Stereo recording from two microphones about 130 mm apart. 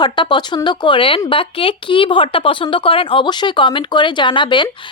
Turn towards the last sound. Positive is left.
turn(degrees=40)  # may be behind; listen again after turning